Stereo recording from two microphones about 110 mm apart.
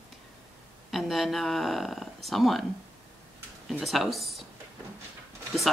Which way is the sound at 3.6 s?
Centre (ahead or behind).